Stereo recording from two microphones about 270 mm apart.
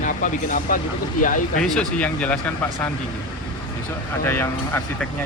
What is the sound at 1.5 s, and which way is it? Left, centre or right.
Speech, centre.